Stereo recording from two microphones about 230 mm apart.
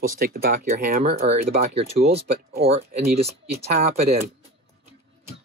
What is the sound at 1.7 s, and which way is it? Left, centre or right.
Speech, right.